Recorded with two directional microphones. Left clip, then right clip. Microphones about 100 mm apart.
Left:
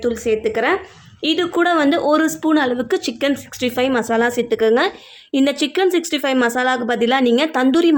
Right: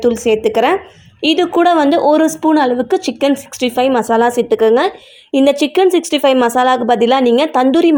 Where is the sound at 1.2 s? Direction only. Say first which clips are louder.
Right 6 dB; 35° right (ahead or behind).